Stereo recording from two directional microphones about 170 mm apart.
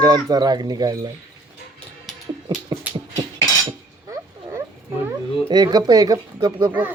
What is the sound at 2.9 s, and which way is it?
Dog, 10° right (ahead or behind).